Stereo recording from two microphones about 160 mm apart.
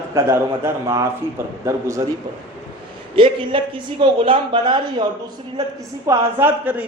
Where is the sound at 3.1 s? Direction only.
30° right (ahead or behind).